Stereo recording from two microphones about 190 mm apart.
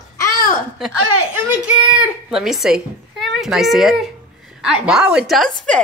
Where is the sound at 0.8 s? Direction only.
5° right (ahead or behind).